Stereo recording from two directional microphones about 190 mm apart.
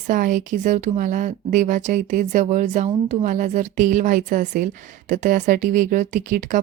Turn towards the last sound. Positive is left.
turn(degrees=-40)  # may be behind; listen again after turning